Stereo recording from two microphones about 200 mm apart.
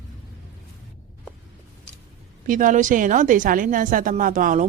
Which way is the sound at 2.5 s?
40° right (ahead or behind).